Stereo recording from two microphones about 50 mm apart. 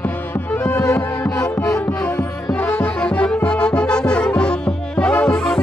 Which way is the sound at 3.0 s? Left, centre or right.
Left.